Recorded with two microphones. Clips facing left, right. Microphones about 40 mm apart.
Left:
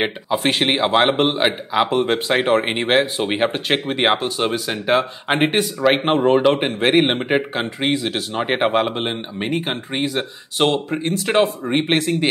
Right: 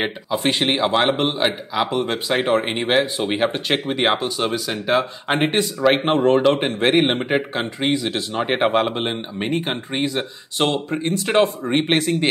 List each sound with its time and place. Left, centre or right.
0.0 s a man's voice: centre